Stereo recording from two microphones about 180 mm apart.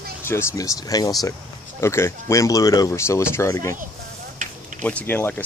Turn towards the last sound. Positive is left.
turn(degrees=10)  # may be behind; listen again after turning